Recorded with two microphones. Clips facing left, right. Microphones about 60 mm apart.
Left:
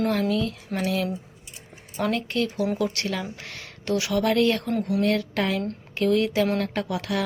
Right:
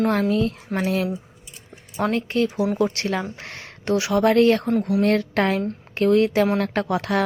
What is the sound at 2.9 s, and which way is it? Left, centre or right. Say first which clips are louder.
Speech: right 4 dB; right.